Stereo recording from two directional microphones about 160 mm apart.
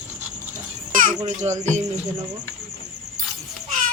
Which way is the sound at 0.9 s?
60° right (ahead or behind).